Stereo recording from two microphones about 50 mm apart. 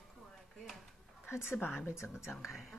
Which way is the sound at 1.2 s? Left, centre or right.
Left.